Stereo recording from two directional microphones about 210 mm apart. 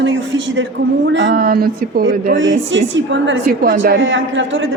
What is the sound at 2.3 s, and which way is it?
A woman's voice, 65° right (ahead or behind).